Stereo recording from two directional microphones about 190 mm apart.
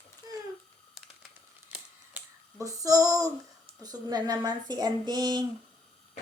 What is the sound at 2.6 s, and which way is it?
Female singing, 15° right (ahead or behind).